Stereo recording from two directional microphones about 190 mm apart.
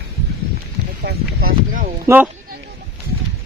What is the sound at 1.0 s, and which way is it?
Speech, 50° right (ahead or behind).